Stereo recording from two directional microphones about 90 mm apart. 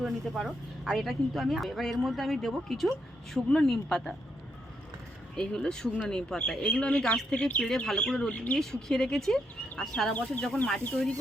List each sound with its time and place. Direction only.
0.0 s speech: centre (ahead or behind)
5.4 s speech: 10° left (ahead or behind)
10.1 s speech: 15° left (ahead or behind)